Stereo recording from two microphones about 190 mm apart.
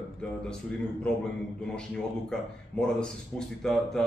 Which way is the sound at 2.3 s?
5° left (ahead or behind).